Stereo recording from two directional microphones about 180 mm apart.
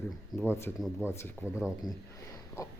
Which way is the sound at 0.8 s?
5° right (ahead or behind).